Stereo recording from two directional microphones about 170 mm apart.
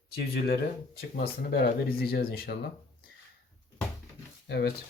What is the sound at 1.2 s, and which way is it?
Speech, 65° left (ahead or behind).